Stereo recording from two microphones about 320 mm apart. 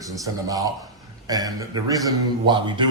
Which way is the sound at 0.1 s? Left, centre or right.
Centre.